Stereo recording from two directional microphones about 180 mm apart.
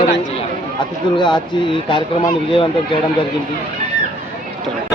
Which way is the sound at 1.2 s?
25° left (ahead or behind).